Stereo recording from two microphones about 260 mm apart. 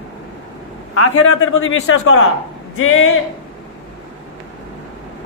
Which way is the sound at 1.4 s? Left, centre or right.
Left.